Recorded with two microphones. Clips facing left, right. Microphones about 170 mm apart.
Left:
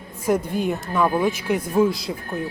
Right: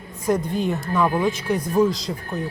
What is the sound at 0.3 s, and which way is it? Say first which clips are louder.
Speech: even; 5° left (ahead or behind).